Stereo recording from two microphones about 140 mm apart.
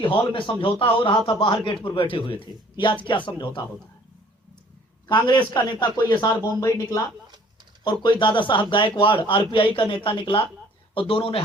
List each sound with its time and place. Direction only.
0.0 s speech: 40° left (ahead or behind)
5.0 s speech: 30° left (ahead or behind)
7.9 s speech: 35° left (ahead or behind)